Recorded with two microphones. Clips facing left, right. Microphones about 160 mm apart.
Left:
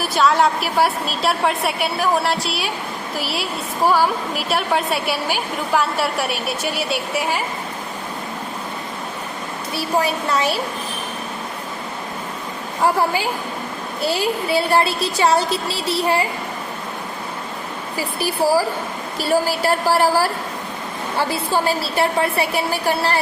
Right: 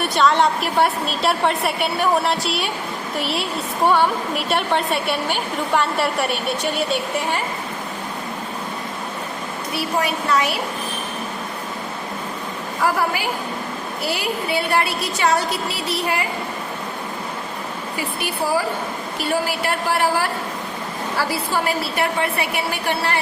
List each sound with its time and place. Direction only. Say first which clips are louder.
0.0 s a woman's voice: even; centre (ahead or behind)
9.7 s a woman's voice: left 2 dB; 30° left (ahead or behind)
12.8 s a woman's voice: left 3 dB; 25° left (ahead or behind)
17.9 s a woman's voice: left 4 dB; 35° left (ahead or behind)
21.2 s a woman's voice: left 3 dB; 25° left (ahead or behind)